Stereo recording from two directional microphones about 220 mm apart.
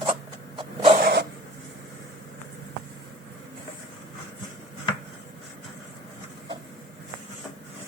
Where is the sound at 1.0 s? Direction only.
45° right (ahead or behind).